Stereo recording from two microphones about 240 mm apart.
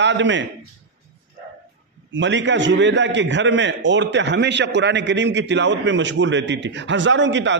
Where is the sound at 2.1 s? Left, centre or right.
Right.